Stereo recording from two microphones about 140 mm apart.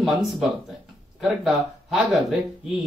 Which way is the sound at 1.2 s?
Centre (ahead or behind).